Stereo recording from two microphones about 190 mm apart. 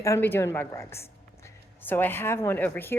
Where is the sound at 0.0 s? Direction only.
15° left (ahead or behind).